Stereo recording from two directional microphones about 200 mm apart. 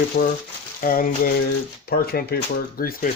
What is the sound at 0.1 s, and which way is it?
Speech, 50° left (ahead or behind).